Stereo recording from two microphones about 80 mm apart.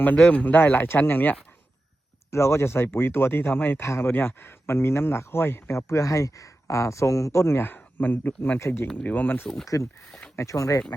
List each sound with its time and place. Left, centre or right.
0.2 s speech: centre
2.3 s speech: left
8.5 s speech: left
8.9 s speech: centre
9.1 s speech: left
9.7 s speech: left